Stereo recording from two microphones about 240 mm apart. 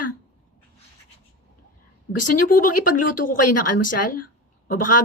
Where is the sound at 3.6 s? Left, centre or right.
Left.